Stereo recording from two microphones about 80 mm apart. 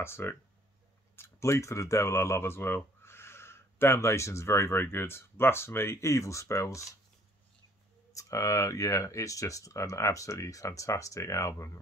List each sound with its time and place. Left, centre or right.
0.0 s speech: left
8.1 s speech: left